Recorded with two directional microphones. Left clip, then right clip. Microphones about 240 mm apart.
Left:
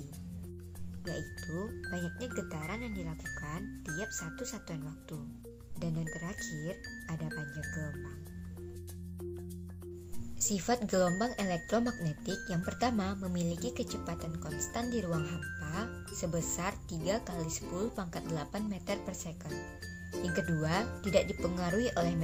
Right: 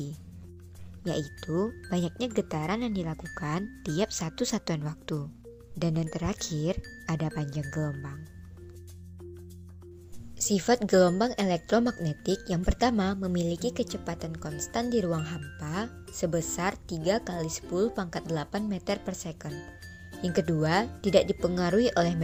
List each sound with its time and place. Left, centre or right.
1.0 s speech: right
10.3 s speech: right